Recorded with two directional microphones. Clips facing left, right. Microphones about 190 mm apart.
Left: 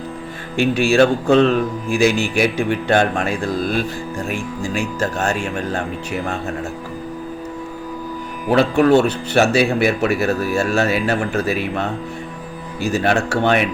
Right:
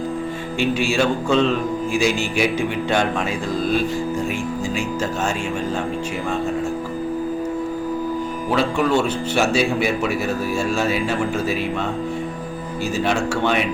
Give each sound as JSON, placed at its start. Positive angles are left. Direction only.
{"t": 0.5, "sound": "speech", "side_deg": 55}
{"t": 8.4, "sound": "speech", "side_deg": 60}
{"t": 12.9, "sound": "speech", "side_deg": 65}